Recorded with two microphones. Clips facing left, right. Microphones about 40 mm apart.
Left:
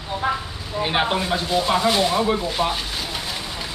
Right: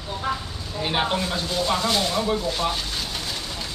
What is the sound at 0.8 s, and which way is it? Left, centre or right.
Speech, centre.